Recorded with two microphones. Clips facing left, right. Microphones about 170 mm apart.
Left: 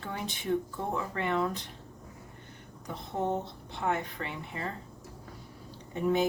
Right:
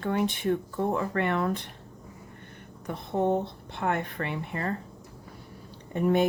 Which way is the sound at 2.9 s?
60° right (ahead or behind).